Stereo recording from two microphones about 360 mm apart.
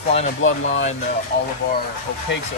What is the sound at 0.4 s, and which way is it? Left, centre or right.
Speech, left.